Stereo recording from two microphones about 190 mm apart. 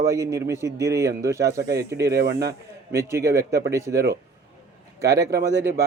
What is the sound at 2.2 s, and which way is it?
Speech, 55° right (ahead or behind).